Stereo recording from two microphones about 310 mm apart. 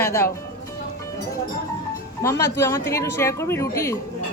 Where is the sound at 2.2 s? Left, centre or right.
Centre.